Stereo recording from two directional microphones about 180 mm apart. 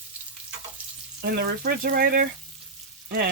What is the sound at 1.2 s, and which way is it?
Frying, 60° right (ahead or behind).